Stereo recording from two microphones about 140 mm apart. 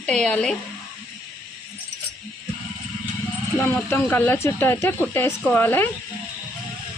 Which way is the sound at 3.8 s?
15° left (ahead or behind).